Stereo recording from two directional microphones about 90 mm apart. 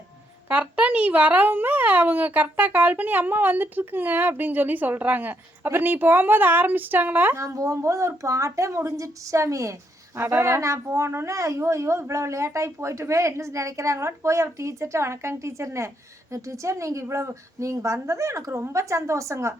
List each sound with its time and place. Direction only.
0.4 s a child's voice: 15° right (ahead or behind)
7.4 s a woman's voice: 35° right (ahead or behind)